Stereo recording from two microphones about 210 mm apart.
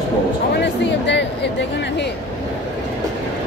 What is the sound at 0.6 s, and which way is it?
Music, 55° left (ahead or behind).